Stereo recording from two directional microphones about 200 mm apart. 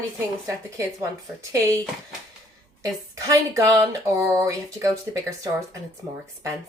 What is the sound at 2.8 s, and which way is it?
Speech, 15° right (ahead or behind).